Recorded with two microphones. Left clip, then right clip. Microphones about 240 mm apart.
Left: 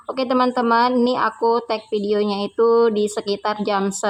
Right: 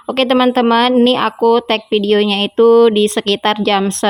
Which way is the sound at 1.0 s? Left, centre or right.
Right.